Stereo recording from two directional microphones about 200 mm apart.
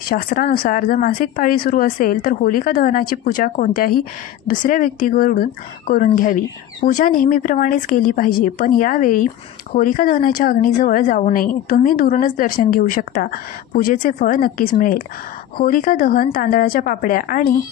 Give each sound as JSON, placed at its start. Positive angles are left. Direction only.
{"t": 0.1, "sound": "speech", "side_deg": 45}